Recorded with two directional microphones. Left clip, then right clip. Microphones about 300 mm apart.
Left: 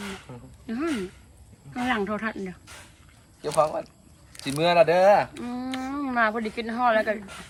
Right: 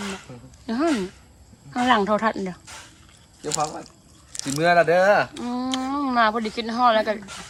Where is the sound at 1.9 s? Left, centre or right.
Centre.